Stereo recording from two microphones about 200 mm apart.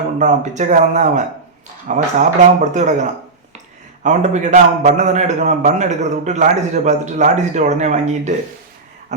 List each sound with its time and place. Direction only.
0.2 s a man's voice: 35° right (ahead or behind)